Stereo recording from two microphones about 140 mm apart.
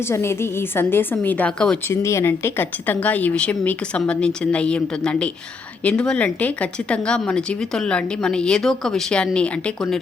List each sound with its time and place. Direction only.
0.1 s a woman's voice: 20° left (ahead or behind)
1.9 s speech: 20° left (ahead or behind)